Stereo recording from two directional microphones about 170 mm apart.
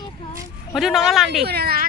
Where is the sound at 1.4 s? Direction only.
65° right (ahead or behind).